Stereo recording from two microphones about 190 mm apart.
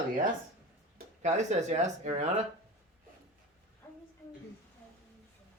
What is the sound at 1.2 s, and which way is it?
Speech, 40° right (ahead or behind).